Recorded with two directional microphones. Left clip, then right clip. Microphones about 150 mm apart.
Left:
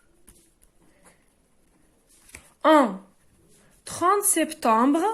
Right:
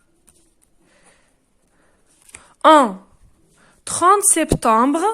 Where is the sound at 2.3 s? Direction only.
50° right (ahead or behind).